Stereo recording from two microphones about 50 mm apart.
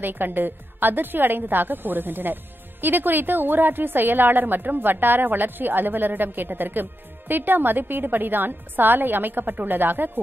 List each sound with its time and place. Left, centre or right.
0.0 s a woman's voice: right